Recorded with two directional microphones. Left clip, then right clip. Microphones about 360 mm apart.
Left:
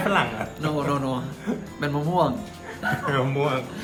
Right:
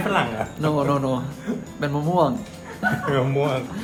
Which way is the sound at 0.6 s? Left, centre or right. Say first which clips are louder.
Right 4 dB; centre.